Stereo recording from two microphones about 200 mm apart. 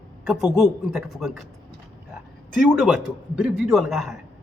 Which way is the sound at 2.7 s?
5° right (ahead or behind).